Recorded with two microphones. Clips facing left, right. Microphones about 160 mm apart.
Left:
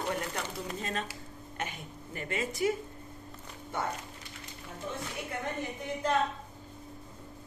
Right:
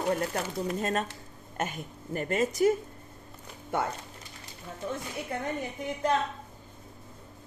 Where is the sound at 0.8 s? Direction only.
45° right (ahead or behind).